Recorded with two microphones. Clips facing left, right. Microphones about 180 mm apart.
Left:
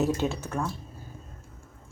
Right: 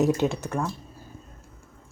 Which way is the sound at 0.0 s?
15° right (ahead or behind).